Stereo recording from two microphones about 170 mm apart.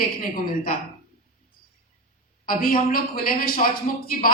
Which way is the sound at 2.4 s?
55° left (ahead or behind).